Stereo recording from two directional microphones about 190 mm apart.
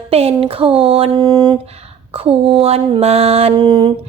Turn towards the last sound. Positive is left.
turn(degrees=-20)  # may be behind; listen again after turning